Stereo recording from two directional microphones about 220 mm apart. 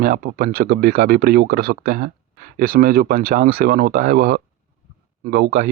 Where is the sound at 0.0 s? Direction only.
40° right (ahead or behind).